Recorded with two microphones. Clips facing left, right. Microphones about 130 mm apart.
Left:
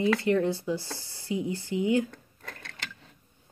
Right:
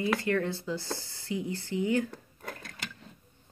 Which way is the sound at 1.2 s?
20° left (ahead or behind).